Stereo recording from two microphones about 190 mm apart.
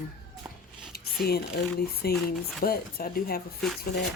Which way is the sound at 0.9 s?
55° left (ahead or behind).